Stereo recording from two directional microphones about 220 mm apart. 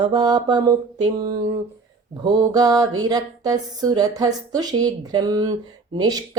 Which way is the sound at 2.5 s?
15° right (ahead or behind).